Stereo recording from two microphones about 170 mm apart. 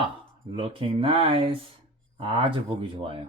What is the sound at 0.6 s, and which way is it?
Speech, 30° right (ahead or behind).